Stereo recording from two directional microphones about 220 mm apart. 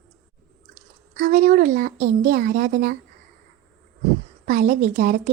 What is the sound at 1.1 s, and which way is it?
Speech, 35° right (ahead or behind).